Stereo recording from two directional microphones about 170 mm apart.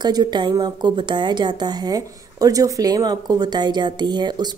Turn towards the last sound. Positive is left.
turn(degrees=-25)  # may be behind; listen again after turning